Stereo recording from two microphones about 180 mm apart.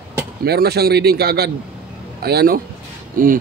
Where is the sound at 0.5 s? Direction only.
60° right (ahead or behind).